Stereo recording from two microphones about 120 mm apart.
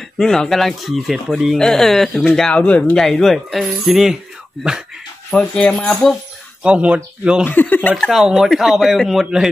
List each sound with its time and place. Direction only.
0.2 s speech: 5° left (ahead or behind)
5.3 s speech: 10° left (ahead or behind)
6.6 s speech: 10° right (ahead or behind)
7.4 s speech: 15° left (ahead or behind)
7.9 s speech: centre (ahead or behind)